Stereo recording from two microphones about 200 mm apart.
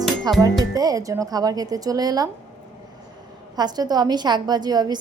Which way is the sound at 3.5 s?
20° right (ahead or behind).